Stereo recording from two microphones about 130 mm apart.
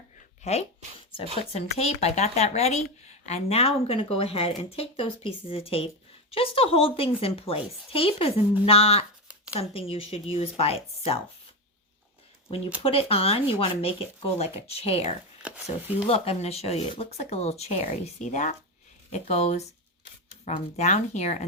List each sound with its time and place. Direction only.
0.4 s speech: 55° left (ahead or behind)
12.8 s speech: 45° left (ahead or behind)
15.4 s speech: 10° right (ahead or behind)
16.0 s speech: 50° left (ahead or behind); by 18.5 s 65° left (ahead or behind)
19.1 s speech: 55° left (ahead or behind)
20.7 s speech: 60° left (ahead or behind)